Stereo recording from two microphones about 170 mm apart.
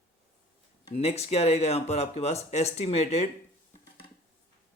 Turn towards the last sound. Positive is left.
turn(degrees=40)  # may be behind; listen again after turning